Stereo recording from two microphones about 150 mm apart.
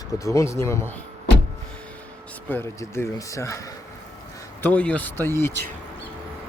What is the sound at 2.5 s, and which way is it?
Speech, 15° left (ahead or behind).